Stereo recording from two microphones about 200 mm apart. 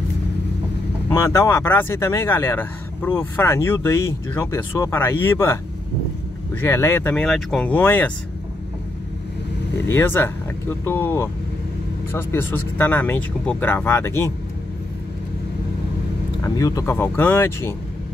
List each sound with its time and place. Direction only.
1.1 s speech: 15° left (ahead or behind)
6.6 s speech: 10° left (ahead or behind)
9.8 s speech: 10° left (ahead or behind)
16.4 s speech: 15° left (ahead or behind)